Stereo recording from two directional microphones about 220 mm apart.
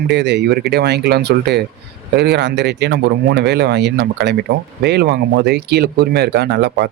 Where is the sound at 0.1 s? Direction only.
50° right (ahead or behind).